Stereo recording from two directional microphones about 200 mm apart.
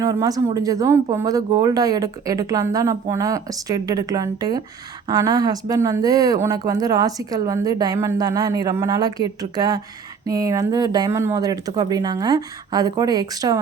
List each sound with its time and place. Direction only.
0.0 s speech: 15° right (ahead or behind)